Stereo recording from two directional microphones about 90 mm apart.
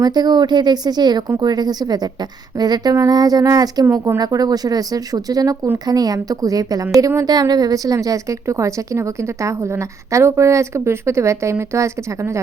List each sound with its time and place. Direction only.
0.0 s a woman's voice: 50° right (ahead or behind); by 12.4 s 30° right (ahead or behind)